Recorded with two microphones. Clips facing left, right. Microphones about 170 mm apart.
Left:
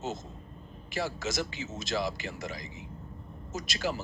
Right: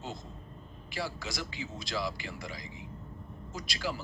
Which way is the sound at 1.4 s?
25° left (ahead or behind).